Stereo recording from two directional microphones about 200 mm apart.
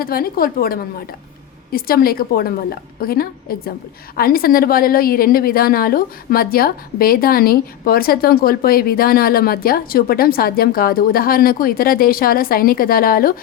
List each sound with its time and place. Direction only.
0.0 s a woman's voice: 50° left (ahead or behind)